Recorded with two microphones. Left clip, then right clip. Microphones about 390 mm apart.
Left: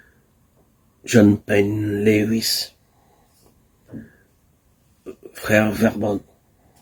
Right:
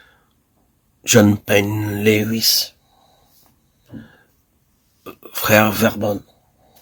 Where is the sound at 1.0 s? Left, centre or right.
Right.